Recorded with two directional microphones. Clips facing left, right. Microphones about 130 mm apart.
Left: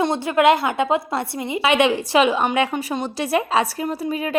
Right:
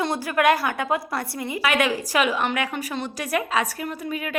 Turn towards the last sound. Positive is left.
turn(degrees=30)  # may be behind; listen again after turning